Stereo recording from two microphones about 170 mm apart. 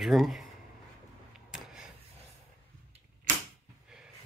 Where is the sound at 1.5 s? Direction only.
5° right (ahead or behind).